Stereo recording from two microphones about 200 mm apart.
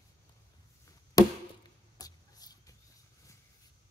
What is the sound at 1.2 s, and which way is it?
Chop, 20° left (ahead or behind).